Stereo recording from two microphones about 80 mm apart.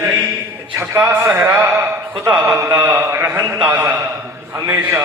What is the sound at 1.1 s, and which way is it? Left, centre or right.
Speech, right.